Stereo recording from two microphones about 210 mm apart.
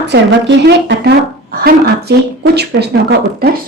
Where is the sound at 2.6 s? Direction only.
50° right (ahead or behind).